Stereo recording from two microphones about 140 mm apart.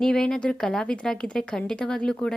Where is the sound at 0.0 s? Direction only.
5° left (ahead or behind).